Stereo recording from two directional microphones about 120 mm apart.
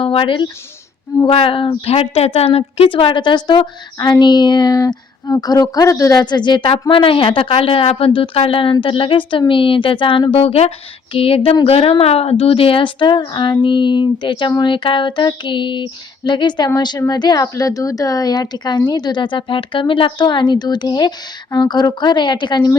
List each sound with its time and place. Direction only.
0.0 s speech: 50° left (ahead or behind)
10.3 s speech: 55° left (ahead or behind); by 14.5 s 40° left (ahead or behind)
14.5 s a sound: 40° left (ahead or behind)